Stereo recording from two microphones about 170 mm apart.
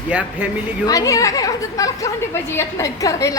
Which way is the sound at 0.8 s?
20° left (ahead or behind).